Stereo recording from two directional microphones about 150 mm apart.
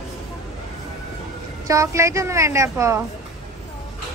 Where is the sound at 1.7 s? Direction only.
20° right (ahead or behind).